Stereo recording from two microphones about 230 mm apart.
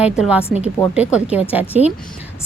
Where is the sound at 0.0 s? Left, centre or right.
Centre.